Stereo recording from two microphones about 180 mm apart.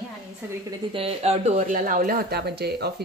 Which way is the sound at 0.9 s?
35° right (ahead or behind).